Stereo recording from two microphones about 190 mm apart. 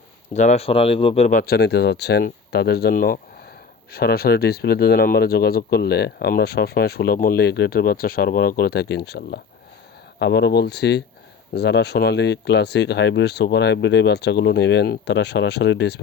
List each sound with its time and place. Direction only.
0.3 s speech: 35° left (ahead or behind)
1.4 s speech: 55° left (ahead or behind)